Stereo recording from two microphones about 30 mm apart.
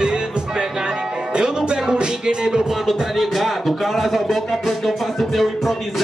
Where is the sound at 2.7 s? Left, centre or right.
Centre.